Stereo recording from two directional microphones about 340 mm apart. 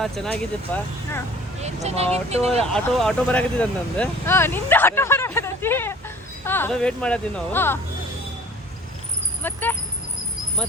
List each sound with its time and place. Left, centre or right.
0.0 s speech: centre
1.6 s speech: centre
2.7 s speech: centre
9.4 s speech: centre